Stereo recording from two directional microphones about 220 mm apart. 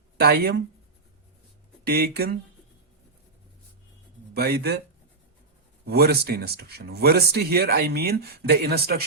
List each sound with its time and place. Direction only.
0.2 s speech: 45° right (ahead or behind)
1.9 s speech: 45° right (ahead or behind)
4.4 s speech: 45° right (ahead or behind)
5.8 s speech: 45° right (ahead or behind)